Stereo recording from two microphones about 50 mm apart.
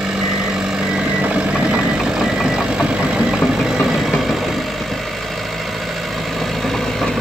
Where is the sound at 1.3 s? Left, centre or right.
Right.